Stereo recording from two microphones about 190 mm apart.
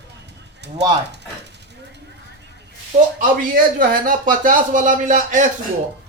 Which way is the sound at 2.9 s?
40° right (ahead or behind).